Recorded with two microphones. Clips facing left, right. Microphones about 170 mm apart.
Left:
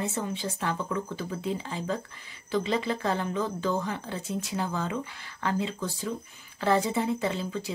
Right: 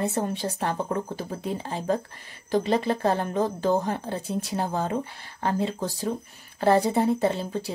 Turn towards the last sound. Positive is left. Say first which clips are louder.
# right 5 dB
turn(degrees=-40)  # may be behind; listen again after turning